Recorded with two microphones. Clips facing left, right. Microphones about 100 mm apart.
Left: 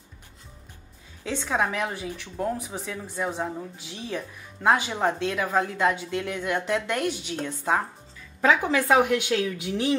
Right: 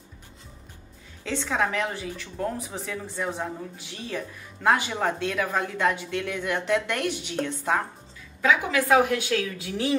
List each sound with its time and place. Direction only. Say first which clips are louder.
1.2 s speech: even; 10° left (ahead or behind)
8.4 s speech: left 1 dB; 35° left (ahead or behind)